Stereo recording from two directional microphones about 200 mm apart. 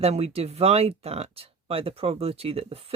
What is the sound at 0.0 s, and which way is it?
Speech, 30° right (ahead or behind).